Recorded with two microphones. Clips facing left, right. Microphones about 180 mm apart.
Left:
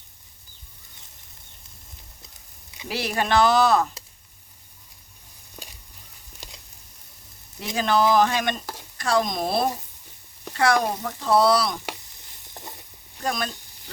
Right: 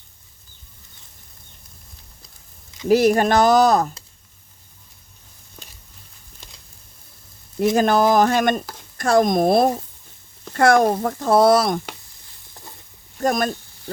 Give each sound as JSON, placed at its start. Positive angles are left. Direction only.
{"t": 2.8, "sound": "speech", "side_deg": -45}
{"t": 7.6, "sound": "speech", "side_deg": -50}
{"t": 13.1, "sound": "sizzle", "side_deg": -45}